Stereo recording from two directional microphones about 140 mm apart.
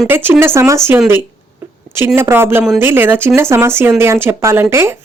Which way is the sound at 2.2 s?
15° right (ahead or behind).